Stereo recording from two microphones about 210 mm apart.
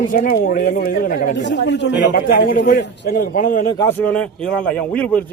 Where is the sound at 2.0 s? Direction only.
40° left (ahead or behind).